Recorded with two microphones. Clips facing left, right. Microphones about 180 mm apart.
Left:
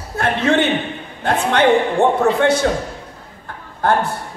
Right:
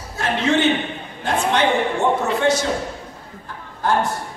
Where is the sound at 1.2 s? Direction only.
60° left (ahead or behind).